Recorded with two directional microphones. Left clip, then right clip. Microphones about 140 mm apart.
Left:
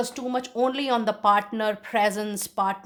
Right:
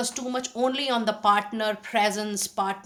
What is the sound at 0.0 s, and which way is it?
A woman's voice, 40° left (ahead or behind).